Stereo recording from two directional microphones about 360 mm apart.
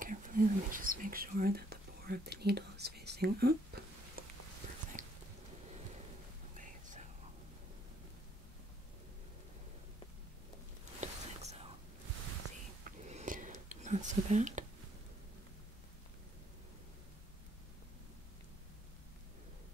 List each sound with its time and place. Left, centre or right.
0.0 s whispering: right
5.0 s a sound: right
6.5 s whispering: right
11.0 s whispering: centre
12.8 s whispering: centre